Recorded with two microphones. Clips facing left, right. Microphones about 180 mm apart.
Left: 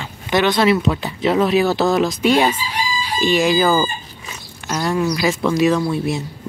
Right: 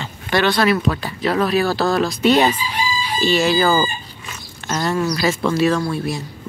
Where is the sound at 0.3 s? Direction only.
20° left (ahead or behind).